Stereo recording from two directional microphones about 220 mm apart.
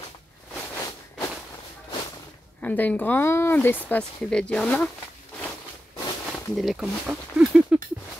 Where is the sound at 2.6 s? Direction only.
5° left (ahead or behind).